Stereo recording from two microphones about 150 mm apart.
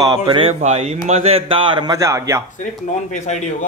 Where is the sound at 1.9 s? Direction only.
20° right (ahead or behind).